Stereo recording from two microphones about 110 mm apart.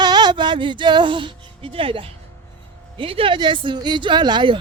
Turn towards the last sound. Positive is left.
turn(degrees=-45)  # may be behind; listen again after turning